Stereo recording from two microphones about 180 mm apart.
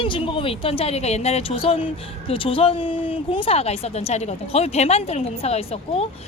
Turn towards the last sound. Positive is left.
turn(degrees=35)  # may be behind; listen again after turning